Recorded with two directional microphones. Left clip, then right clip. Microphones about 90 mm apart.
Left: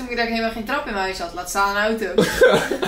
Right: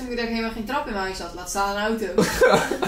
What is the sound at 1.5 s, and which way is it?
Speech, 25° left (ahead or behind).